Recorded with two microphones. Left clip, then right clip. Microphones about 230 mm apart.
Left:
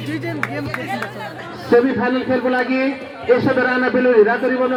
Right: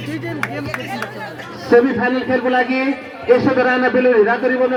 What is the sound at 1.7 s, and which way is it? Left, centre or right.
A man's voice, right.